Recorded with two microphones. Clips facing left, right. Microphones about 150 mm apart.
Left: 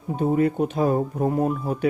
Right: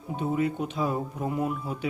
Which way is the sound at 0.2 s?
45° left (ahead or behind).